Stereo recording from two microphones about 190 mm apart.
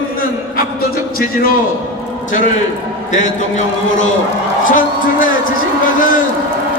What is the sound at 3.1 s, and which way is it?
Speech, 40° left (ahead or behind).